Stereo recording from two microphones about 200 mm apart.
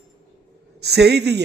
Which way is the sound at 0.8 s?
55° right (ahead or behind).